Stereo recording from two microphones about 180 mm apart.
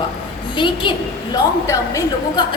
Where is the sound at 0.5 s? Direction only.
25° left (ahead or behind).